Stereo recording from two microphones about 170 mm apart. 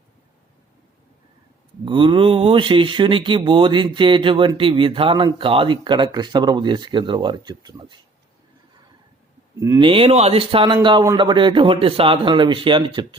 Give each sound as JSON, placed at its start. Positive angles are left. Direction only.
{"t": 1.8, "sound": "speech", "side_deg": -30}
{"t": 9.6, "sound": "speech", "side_deg": -25}